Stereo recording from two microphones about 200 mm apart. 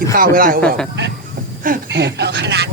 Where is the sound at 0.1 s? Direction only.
45° right (ahead or behind).